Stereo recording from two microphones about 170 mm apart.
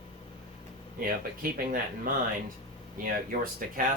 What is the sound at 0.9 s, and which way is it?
Speech, 60° right (ahead or behind).